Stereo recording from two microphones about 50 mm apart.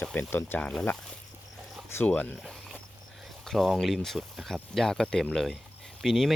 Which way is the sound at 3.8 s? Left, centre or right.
Centre.